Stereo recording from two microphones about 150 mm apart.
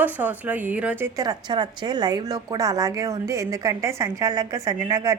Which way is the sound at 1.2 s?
30° right (ahead or behind).